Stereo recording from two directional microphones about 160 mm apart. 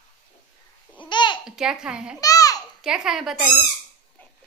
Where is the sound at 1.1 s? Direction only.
30° left (ahead or behind).